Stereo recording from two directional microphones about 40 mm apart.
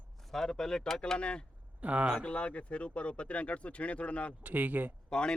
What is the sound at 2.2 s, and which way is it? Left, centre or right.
Speech, left.